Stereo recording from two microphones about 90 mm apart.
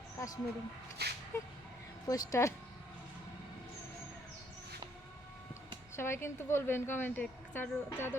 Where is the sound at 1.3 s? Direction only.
30° left (ahead or behind).